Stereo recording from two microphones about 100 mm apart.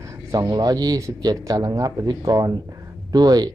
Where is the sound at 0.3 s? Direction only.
40° right (ahead or behind).